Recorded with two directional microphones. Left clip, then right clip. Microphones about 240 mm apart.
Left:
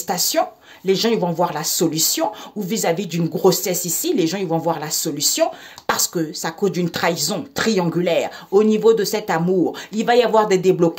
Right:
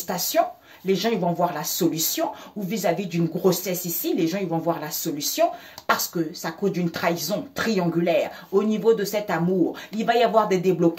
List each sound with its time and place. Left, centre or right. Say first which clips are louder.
0.0 s speech: left 3 dB; left